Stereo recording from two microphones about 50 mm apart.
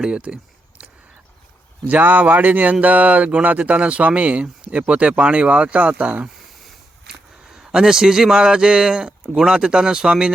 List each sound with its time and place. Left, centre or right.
0.0 s speech: centre
1.8 s speech: right
7.1 s a man's voice: centre